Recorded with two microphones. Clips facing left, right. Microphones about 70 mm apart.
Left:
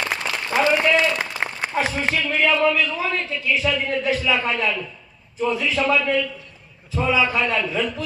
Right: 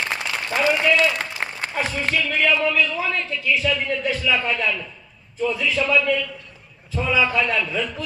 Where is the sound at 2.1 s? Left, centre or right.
Left.